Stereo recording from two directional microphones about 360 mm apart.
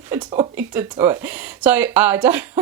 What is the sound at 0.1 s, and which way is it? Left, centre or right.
Speech, centre.